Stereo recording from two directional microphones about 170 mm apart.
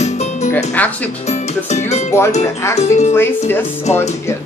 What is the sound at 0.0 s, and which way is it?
Music, 40° left (ahead or behind).